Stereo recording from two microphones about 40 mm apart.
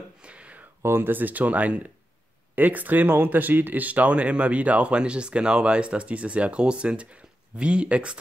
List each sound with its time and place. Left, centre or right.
0.2 s a sound: right
0.8 s speech: right
1.1 s speech: right